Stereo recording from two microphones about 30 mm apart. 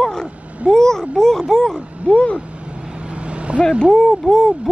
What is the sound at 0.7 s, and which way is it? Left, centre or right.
Speech, centre.